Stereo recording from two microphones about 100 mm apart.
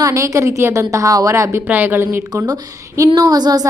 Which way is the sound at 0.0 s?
30° right (ahead or behind).